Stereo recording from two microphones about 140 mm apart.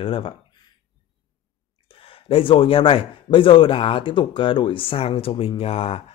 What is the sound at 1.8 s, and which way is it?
Speech, 40° left (ahead or behind).